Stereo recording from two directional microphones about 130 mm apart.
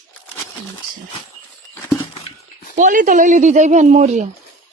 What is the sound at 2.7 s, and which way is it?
Speech, 75° right (ahead or behind).